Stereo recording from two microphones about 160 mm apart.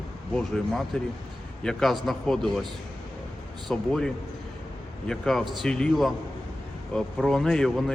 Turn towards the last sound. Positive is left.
turn(degrees=5)  # may be behind; listen again after turning